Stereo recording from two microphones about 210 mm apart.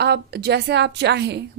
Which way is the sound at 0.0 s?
50° right (ahead or behind).